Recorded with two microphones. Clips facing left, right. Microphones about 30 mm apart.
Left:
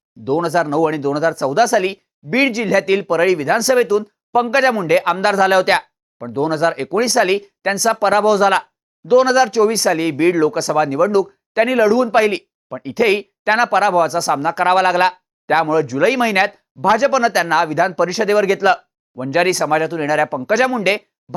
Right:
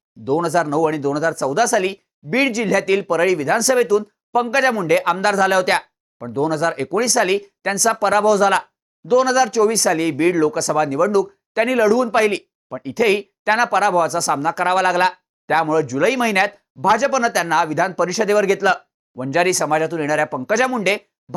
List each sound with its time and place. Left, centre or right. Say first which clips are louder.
0.3 s speech: left 1 dB; left
21.3 s plop: left 2 dB; centre